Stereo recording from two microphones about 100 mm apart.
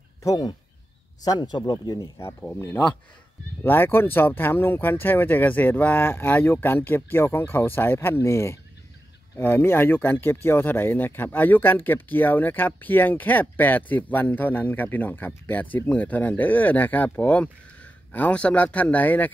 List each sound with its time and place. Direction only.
0.2 s speech: 40° left (ahead or behind)
2.7 s speech: 10° left (ahead or behind)